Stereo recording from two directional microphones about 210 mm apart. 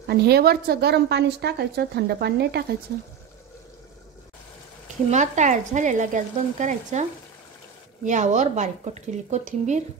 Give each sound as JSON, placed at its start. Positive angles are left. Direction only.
{"t": 0.0, "sound": "a woman's voice", "side_deg": -50}
{"t": 5.1, "sound": "speech", "side_deg": -35}